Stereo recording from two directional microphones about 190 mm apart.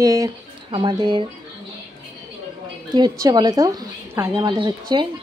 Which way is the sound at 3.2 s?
20° right (ahead or behind).